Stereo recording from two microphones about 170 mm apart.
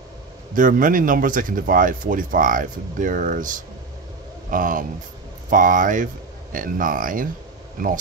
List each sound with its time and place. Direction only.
0.6 s speech: 50° right (ahead or behind)